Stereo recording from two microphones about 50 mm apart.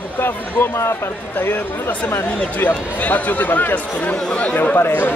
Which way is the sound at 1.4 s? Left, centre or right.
Left.